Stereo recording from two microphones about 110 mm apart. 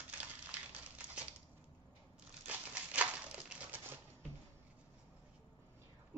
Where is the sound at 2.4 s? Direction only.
15° right (ahead or behind).